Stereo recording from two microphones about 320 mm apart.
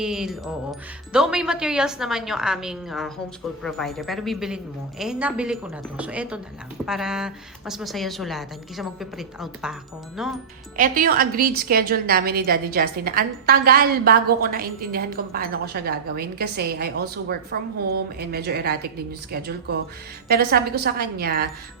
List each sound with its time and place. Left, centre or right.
0.0 s speech: centre
10.8 s a woman's voice: right